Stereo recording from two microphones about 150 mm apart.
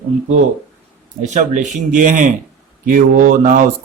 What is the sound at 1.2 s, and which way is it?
Speech, 55° right (ahead or behind).